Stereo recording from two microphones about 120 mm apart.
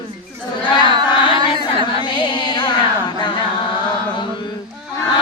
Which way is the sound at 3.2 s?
40° left (ahead or behind).